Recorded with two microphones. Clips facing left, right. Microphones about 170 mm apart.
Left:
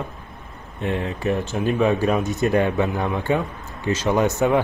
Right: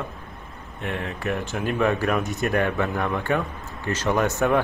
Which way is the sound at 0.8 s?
30° left (ahead or behind).